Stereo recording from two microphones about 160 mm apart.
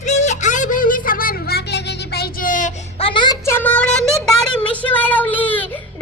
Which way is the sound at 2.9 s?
30° left (ahead or behind).